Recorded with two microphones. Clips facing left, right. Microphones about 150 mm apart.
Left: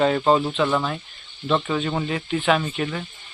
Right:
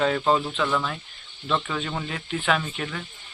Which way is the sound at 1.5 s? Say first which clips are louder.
Left 5 dB; 15° left (ahead or behind).